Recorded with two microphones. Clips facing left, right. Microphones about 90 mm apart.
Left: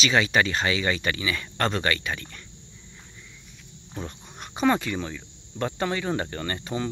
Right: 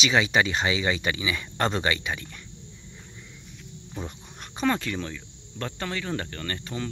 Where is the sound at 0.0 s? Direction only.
10° right (ahead or behind).